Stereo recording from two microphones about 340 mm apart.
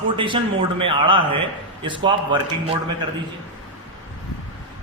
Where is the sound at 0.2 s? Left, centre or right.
Centre.